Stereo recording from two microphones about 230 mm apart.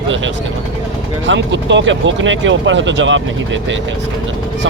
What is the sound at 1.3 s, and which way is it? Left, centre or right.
Speech, right.